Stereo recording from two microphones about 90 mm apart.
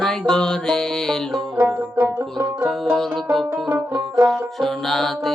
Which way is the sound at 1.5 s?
20° right (ahead or behind).